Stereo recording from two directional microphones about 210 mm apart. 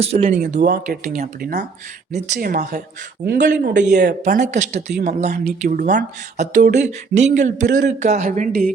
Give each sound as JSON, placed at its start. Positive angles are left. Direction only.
{"t": 0.0, "sound": "speech", "side_deg": -30}
{"t": 5.3, "sound": "speech", "side_deg": -45}